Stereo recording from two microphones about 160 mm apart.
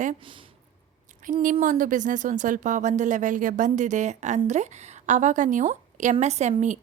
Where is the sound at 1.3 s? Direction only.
55° right (ahead or behind).